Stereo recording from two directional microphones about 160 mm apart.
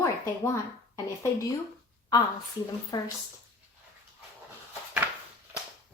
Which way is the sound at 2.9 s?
25° left (ahead or behind).